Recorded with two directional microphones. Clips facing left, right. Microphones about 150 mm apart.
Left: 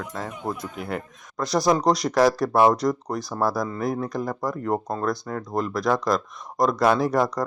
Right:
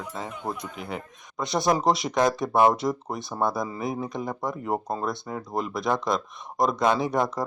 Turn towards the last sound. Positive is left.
turn(degrees=0)  # may be behind; listen again after turning